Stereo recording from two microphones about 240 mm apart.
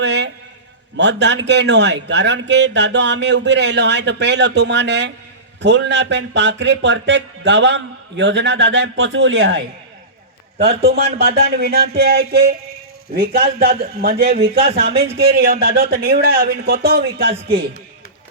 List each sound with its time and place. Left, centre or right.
0.0 s a man's voice: right
10.8 s speech: right